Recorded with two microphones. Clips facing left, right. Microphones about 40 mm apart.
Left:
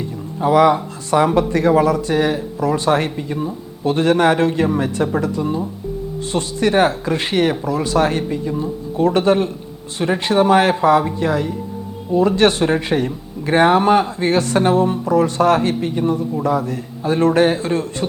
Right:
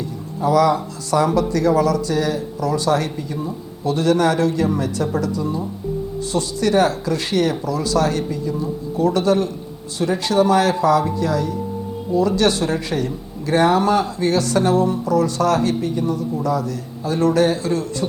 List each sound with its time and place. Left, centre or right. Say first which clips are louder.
0.0 s speech: left 2 dB; left